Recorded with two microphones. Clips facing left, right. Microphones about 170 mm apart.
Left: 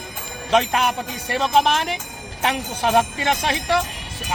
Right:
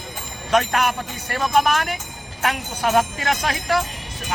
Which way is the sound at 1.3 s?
25° left (ahead or behind).